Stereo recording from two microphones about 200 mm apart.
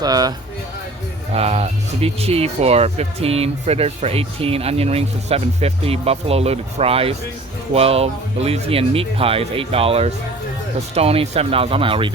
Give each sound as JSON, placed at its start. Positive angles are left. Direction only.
{"t": 0.0, "sound": "speech", "side_deg": -20}
{"t": 1.3, "sound": "speech", "side_deg": -30}